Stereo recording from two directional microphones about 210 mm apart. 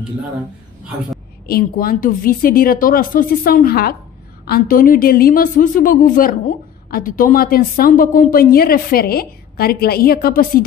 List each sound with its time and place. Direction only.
1.5 s a woman's voice: 45° left (ahead or behind)